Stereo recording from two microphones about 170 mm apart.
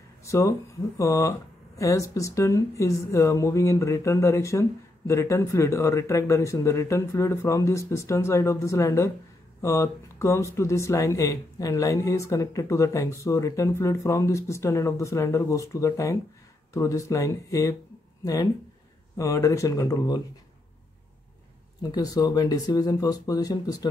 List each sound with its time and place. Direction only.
0.2 s speech: 15° left (ahead or behind)
21.9 s speech: 20° left (ahead or behind)